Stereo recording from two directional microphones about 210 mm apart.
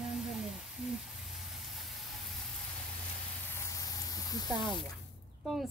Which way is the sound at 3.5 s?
15° left (ahead or behind).